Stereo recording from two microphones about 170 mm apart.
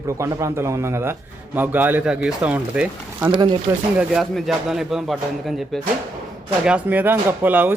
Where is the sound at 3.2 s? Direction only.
25° right (ahead or behind).